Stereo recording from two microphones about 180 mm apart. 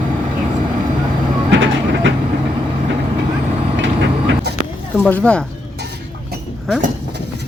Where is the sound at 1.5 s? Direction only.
90° right.